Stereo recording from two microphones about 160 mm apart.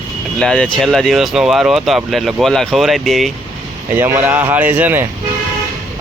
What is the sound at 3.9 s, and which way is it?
Speech, 15° right (ahead or behind).